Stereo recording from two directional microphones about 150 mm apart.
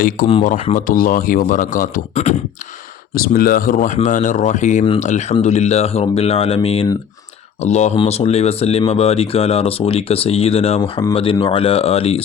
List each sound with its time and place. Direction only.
0.2 s a man's voice: 65° left (ahead or behind)
3.2 s speech: 75° left (ahead or behind); by 12.2 s 40° left (ahead or behind)